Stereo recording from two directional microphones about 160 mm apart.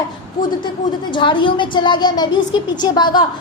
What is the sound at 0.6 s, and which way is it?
A woman's voice, 30° left (ahead or behind).